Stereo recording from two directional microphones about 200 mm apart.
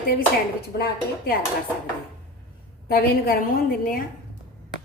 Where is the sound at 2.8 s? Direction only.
50° left (ahead or behind).